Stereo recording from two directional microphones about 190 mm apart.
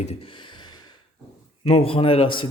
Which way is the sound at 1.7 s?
30° left (ahead or behind).